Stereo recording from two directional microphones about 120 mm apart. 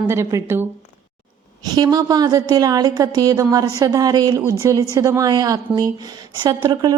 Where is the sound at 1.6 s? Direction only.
30° right (ahead or behind).